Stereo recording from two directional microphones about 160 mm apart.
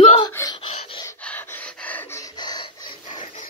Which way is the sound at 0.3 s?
20° left (ahead or behind).